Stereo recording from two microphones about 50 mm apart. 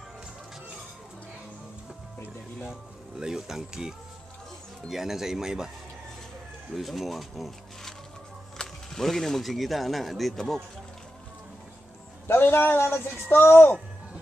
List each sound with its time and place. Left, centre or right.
2.6 s speech: centre
6.8 s speech: centre
12.3 s speech: left